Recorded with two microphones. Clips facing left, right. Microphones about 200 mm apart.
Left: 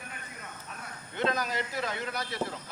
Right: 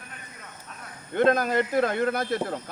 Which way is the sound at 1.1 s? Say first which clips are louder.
Right 9 dB; 55° right (ahead or behind).